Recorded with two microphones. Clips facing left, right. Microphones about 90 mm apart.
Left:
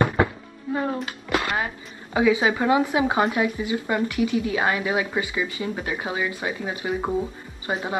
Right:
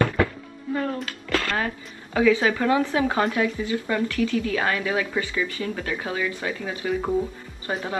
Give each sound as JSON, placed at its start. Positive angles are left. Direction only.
{"t": 0.0, "sound": "music", "side_deg": 20}
{"t": 1.0, "sound": "a sound", "side_deg": 20}
{"t": 2.1, "sound": "speech", "side_deg": 20}